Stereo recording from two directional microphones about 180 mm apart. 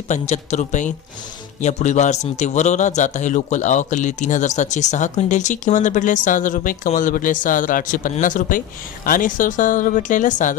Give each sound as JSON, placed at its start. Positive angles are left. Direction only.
{"t": 0.1, "sound": "a man's voice", "side_deg": 40}